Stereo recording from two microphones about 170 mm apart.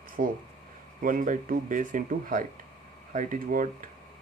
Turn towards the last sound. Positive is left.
turn(degrees=-50)  # may be behind; listen again after turning